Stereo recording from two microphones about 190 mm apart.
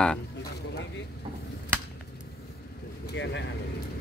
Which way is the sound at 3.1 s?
70° left (ahead or behind).